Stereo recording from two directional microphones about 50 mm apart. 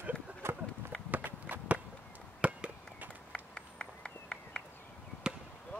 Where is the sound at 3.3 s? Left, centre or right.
Centre.